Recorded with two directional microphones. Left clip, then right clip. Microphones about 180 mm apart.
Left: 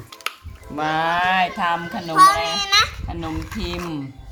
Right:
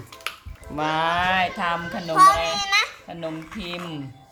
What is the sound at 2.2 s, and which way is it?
Speech, 20° left (ahead or behind).